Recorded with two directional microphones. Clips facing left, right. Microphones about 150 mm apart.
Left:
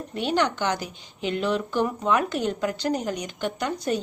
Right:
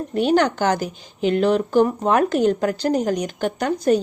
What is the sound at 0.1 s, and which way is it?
A woman's voice, 45° right (ahead or behind).